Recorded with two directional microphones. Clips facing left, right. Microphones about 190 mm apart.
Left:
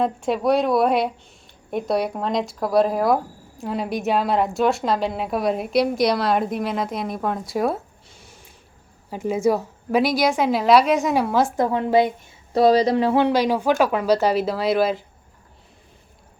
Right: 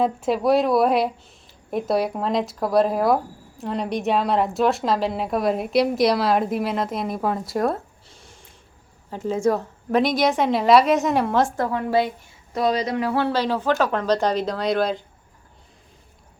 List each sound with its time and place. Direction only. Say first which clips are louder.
0.0 s a woman's voice: even; centre (ahead or behind)
9.0 s a woman's voice: left 1 dB; 10° left (ahead or behind)
11.5 s speech: left 3 dB; 20° left (ahead or behind)
12.5 s speech: left 6 dB; 35° left (ahead or behind); by 15.0 s 5° left (ahead or behind)